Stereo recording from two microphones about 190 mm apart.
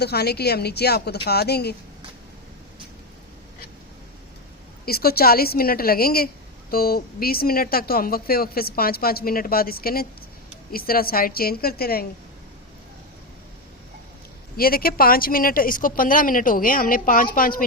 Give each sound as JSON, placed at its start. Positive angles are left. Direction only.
{"t": 0.0, "sound": "speech", "side_deg": 55}
{"t": 4.9, "sound": "speech", "side_deg": 55}
{"t": 14.5, "sound": "speech", "side_deg": 50}